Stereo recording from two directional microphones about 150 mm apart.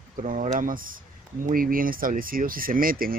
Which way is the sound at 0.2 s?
55° right (ahead or behind).